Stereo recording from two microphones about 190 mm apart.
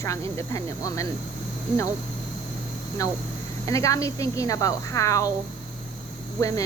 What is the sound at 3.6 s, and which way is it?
Speech, 15° left (ahead or behind).